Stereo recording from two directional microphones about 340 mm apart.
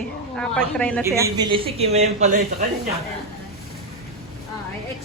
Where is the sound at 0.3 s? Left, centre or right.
Centre.